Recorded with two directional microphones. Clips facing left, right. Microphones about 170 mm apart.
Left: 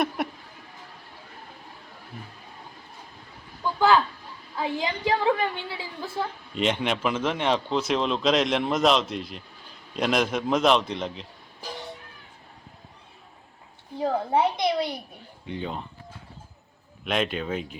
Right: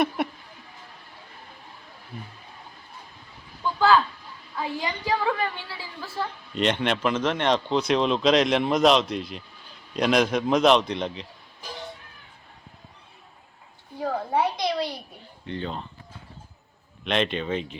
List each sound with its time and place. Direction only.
2.1 s speech: centre (ahead or behind)
3.8 s a sound: 15° left (ahead or behind)
4.5 s a woman's voice: 20° left (ahead or behind)
6.5 s speech: 5° left (ahead or behind)
14.0 s a woman's voice: 25° left (ahead or behind)
15.4 s speech: 10° left (ahead or behind)
17.0 s speech: 5° left (ahead or behind)